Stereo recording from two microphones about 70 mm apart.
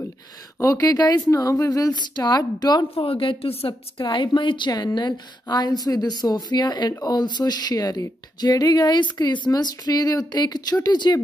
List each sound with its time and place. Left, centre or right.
0.6 s speech: left
0.8 s speech: left
1.3 s speech: left
2.0 s a woman's voice: left
4.0 s a woman's voice: left
6.9 s speech: left
9.2 s speech: left